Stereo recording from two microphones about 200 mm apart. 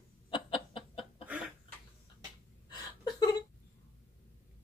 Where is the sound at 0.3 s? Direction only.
25° left (ahead or behind).